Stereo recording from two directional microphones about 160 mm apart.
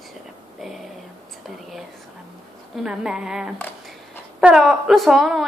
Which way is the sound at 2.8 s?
5° right (ahead or behind).